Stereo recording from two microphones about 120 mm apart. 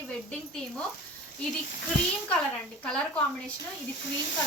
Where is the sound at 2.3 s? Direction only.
10° left (ahead or behind).